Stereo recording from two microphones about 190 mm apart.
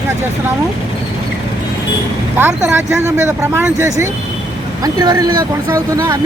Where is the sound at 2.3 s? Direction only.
10° right (ahead or behind).